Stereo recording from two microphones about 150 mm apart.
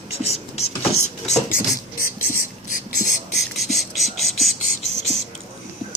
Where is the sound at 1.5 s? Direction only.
75° left (ahead or behind).